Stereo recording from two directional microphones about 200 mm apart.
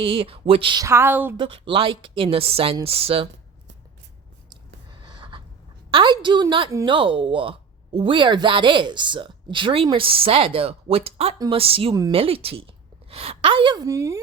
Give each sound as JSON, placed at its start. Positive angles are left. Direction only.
{"t": 0.0, "sound": "speech", "side_deg": -25}
{"t": 1.4, "sound": "speech", "side_deg": -25}
{"t": 5.0, "sound": "a sound", "side_deg": -25}
{"t": 5.9, "sound": "a woman's voice", "side_deg": -25}